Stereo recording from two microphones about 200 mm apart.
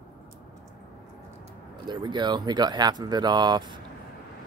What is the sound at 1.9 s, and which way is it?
Speech, 20° right (ahead or behind).